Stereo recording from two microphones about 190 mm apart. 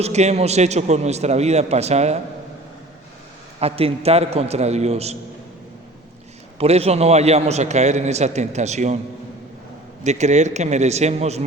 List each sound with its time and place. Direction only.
0.0 s a man's voice: 35° right (ahead or behind)
3.6 s a man's voice: 30° right (ahead or behind)
6.6 s a man's voice: 35° right (ahead or behind)
10.0 s a man's voice: 35° right (ahead or behind)